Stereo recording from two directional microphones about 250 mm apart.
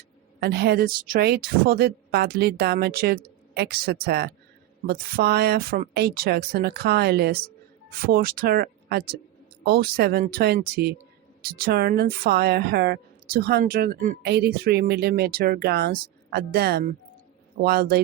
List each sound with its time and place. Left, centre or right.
0.3 s a woman's voice: right